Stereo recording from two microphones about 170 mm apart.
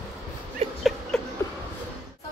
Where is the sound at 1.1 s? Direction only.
5° left (ahead or behind).